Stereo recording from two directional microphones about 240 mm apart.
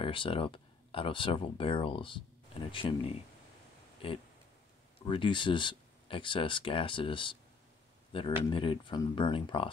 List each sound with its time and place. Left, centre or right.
0.0 s speech: left
4.0 s speech: left
8.4 s speech: left